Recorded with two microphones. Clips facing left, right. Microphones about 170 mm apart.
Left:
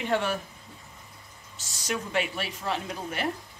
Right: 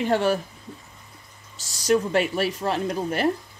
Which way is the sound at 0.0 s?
35° right (ahead or behind).